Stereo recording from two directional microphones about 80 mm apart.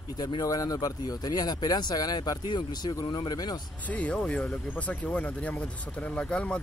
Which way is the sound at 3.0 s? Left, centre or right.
Left.